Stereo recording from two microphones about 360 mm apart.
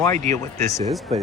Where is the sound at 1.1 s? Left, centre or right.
Centre.